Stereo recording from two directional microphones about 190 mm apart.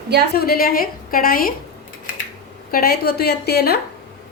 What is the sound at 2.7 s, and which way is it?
A woman's voice, 55° left (ahead or behind).